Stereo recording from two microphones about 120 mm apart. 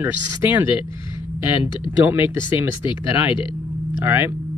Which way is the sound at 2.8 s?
45° left (ahead or behind).